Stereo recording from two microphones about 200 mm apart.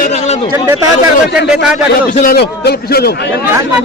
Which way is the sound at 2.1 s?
50° left (ahead or behind).